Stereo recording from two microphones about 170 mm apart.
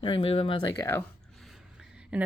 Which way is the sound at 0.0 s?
35° left (ahead or behind).